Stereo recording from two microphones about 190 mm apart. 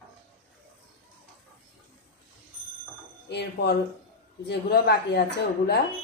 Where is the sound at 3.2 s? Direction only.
60° left (ahead or behind).